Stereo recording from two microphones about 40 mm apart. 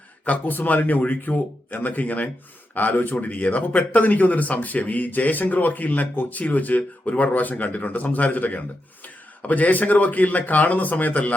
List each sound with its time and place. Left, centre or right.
0.3 s speech: left